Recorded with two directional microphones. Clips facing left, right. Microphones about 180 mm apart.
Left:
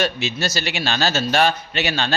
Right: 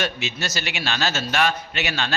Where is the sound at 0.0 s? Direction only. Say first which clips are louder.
Left 5 dB; 35° left (ahead or behind).